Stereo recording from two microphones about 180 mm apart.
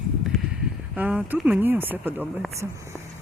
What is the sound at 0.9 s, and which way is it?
Speech, 5° right (ahead or behind).